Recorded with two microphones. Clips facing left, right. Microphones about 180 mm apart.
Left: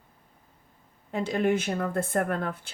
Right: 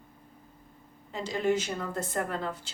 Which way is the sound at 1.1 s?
55° left (ahead or behind).